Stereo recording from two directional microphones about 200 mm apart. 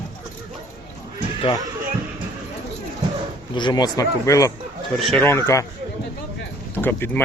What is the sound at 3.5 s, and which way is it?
Speech, 20° left (ahead or behind).